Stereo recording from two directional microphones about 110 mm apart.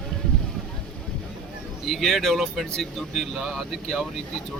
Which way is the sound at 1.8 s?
Centre (ahead or behind).